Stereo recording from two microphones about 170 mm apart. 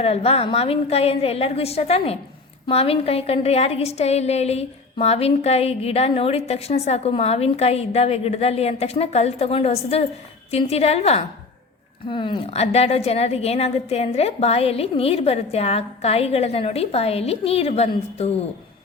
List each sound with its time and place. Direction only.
0.0 s a woman's voice: 35° left (ahead or behind)